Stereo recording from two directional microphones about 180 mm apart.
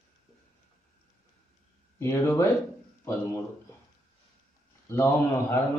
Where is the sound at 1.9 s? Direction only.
15° left (ahead or behind).